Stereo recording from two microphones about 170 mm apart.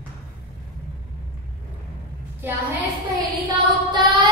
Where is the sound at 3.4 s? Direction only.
25° right (ahead or behind).